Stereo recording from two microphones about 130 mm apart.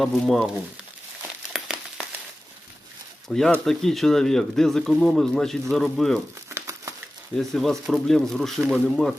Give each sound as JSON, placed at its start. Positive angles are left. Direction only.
{"t": 0.0, "sound": "speech", "side_deg": 0}
{"t": 1.2, "sound": "crumpling", "side_deg": -5}
{"t": 3.2, "sound": "speech", "side_deg": 5}
{"t": 6.5, "sound": "crumpling", "side_deg": -20}
{"t": 7.3, "sound": "speech", "side_deg": 5}